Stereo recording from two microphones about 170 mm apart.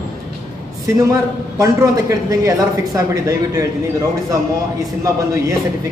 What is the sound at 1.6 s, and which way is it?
Speech, 20° right (ahead or behind).